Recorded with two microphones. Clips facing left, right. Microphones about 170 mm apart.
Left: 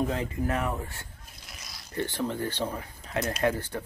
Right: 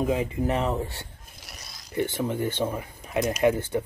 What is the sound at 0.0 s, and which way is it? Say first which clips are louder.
Speech: right 4 dB; 15° right (ahead or behind).